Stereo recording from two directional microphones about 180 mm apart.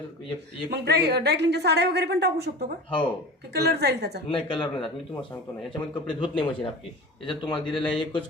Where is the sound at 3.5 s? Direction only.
65° right (ahead or behind).